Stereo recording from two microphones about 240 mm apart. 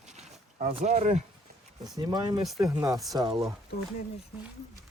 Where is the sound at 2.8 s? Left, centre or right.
Centre.